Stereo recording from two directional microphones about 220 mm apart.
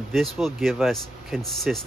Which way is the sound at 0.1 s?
Centre (ahead or behind).